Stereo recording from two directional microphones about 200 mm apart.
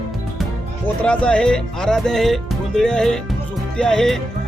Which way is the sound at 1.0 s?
5° left (ahead or behind).